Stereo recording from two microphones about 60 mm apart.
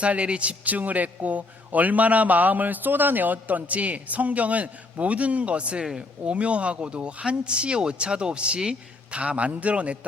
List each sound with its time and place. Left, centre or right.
0.0 s a man's voice: centre